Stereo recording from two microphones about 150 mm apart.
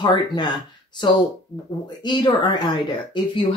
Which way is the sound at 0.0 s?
30° left (ahead or behind).